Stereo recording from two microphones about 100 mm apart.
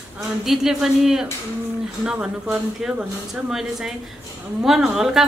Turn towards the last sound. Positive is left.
turn(degrees=-5)  # may be behind; listen again after turning